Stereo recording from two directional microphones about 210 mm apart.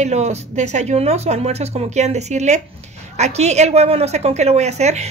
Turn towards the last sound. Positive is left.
turn(degrees=-30)  # may be behind; listen again after turning